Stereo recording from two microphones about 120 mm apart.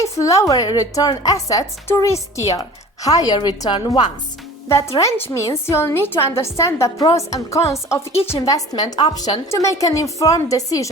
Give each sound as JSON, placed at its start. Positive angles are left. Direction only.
{"t": 0.0, "sound": "a woman's voice", "side_deg": 25}
{"t": 4.9, "sound": "a woman's voice", "side_deg": 20}